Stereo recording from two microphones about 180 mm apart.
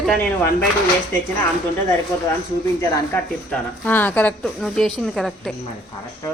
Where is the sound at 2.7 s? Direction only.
15° left (ahead or behind); by 5.5 s centre (ahead or behind).